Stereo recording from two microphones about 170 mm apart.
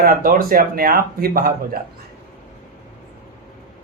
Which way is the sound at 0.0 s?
55° right (ahead or behind).